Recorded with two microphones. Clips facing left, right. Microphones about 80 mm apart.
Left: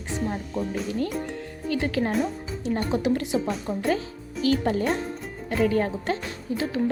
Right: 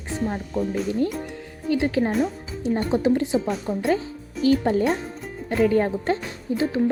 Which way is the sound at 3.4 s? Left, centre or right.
Centre.